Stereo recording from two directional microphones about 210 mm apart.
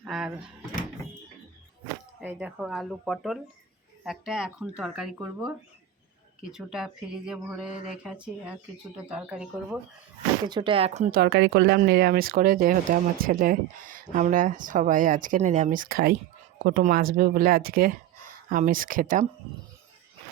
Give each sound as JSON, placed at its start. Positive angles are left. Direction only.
{"t": 0.0, "sound": "drawer open or close", "side_deg": -5}
{"t": 2.2, "sound": "speech", "side_deg": -5}
{"t": 10.4, "sound": "speech", "side_deg": -20}
{"t": 11.2, "sound": "speech", "side_deg": -55}